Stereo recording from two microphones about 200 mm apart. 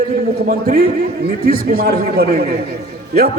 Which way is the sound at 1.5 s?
50° right (ahead or behind).